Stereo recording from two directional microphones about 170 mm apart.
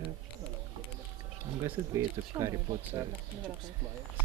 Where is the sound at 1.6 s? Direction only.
15° right (ahead or behind).